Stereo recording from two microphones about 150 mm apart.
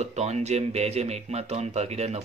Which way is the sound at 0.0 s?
45° right (ahead or behind).